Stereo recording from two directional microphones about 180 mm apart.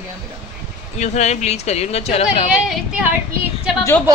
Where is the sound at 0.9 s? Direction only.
40° left (ahead or behind).